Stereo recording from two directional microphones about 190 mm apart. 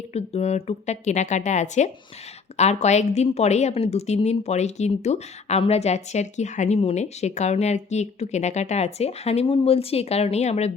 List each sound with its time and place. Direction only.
0.1 s a woman's voice: 35° left (ahead or behind)